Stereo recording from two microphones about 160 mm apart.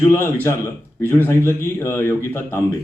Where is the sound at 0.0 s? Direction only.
15° left (ahead or behind).